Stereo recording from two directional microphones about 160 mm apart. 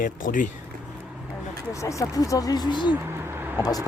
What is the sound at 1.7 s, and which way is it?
Speech, 20° left (ahead or behind).